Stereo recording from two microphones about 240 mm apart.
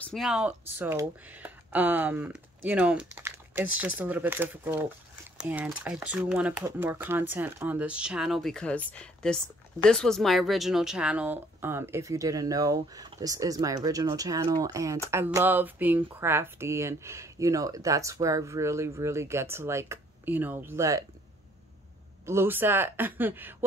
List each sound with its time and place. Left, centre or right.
0.0 s a woman's voice: centre
22.2 s a woman's voice: centre